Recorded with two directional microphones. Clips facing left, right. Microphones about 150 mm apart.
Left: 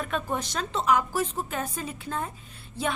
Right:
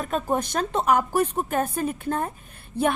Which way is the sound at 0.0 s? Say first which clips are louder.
Right 5 dB; 40° right (ahead or behind).